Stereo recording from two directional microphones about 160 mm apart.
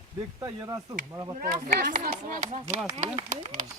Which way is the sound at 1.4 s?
65° right (ahead or behind).